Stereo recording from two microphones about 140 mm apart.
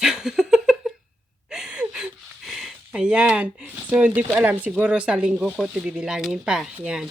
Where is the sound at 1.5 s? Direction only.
5° right (ahead or behind).